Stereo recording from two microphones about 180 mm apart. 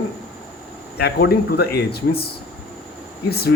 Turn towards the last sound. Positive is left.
turn(degrees=60)  # may be behind; listen again after turning